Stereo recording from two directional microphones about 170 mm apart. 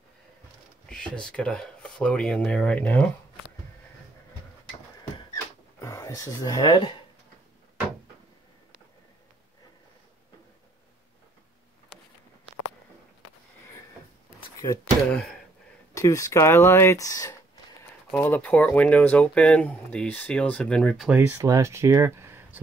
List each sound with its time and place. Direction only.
0.8 s speech: 5° left (ahead or behind)
5.8 s speech: 15° left (ahead or behind)
15.0 s speech: 5° left (ahead or behind)
15.9 s speech: 20° left (ahead or behind); by 21.4 s 5° right (ahead or behind)
21.4 s speech: 15° right (ahead or behind)